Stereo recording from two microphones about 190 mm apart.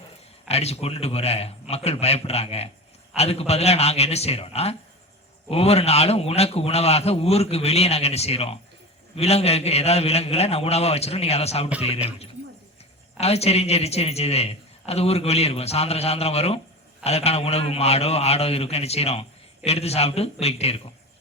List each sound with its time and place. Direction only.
0.4 s a man's voice: 35° left (ahead or behind)
13.1 s a man's voice: 35° left (ahead or behind)